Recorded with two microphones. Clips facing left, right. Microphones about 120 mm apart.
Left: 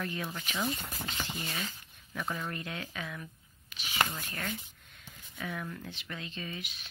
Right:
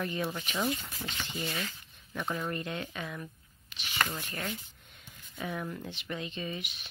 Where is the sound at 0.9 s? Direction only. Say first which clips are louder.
Left 1 dB; 45° left (ahead or behind).